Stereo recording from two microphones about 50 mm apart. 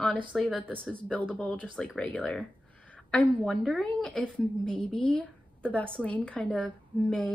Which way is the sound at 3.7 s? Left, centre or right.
Centre.